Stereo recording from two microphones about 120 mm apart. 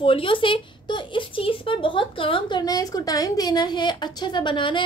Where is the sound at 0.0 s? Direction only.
45° left (ahead or behind).